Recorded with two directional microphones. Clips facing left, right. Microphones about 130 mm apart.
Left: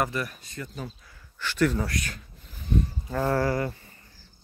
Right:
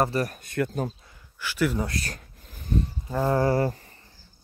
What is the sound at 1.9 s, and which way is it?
Speech, 35° right (ahead or behind).